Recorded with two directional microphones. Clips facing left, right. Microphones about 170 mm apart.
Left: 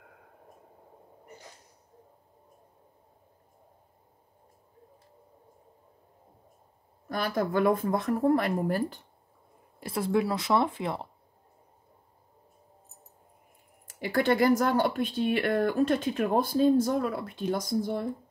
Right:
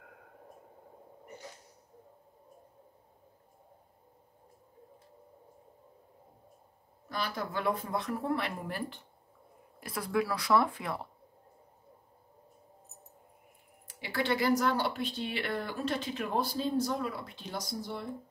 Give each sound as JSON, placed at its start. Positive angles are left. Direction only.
{"t": 7.1, "sound": "speech", "side_deg": 50}
{"t": 9.8, "sound": "speech", "side_deg": 25}
{"t": 13.8, "sound": "speech", "side_deg": 45}